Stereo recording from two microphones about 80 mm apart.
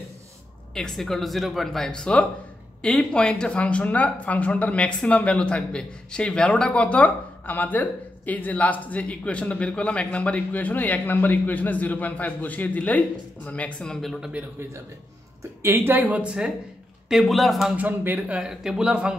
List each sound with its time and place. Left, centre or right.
0.7 s speech: centre
14.6 s speech: right; by 17.7 s centre
17.7 s speech: right
18.4 s speech: centre